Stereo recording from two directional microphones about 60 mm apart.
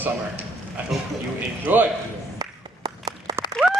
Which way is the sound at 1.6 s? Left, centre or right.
Right.